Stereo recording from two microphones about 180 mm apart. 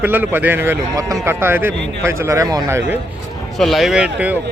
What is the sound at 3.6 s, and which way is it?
Speech, centre (ahead or behind).